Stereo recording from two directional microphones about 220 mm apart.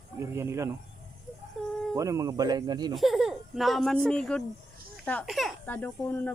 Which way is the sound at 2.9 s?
Centre (ahead or behind).